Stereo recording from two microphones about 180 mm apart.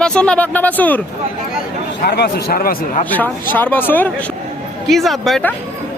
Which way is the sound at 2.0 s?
60° left (ahead or behind).